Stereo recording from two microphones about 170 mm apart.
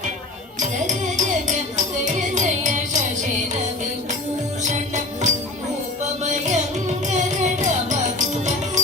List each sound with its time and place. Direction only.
0.9 s music: 45° right (ahead or behind)
4.6 s music: 45° right (ahead or behind)